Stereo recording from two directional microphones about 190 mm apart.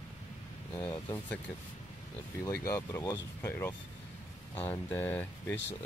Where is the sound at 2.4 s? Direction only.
15° left (ahead or behind).